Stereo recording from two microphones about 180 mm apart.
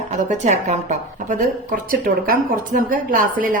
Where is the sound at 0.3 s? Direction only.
40° right (ahead or behind).